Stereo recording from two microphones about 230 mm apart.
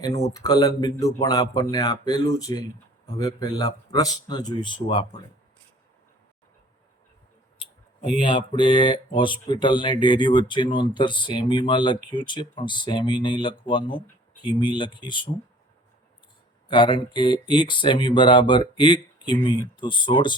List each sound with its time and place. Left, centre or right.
0.3 s a man's voice: centre
8.2 s speech: left
16.6 s speech: left